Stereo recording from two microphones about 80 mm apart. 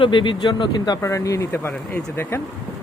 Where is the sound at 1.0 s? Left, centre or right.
Left.